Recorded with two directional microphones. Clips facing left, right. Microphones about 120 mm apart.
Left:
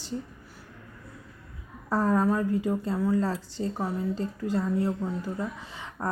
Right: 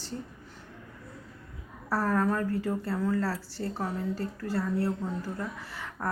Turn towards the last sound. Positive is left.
turn(degrees=20)  # may be behind; listen again after turning